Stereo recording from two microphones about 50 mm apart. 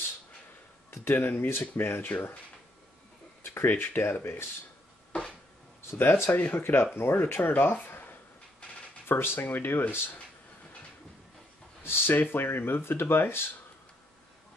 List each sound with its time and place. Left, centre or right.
0.8 s speech: left
3.6 s speech: left
5.9 s speech: left
6.3 s speech: left
7.5 s speech: left
11.8 s speech: left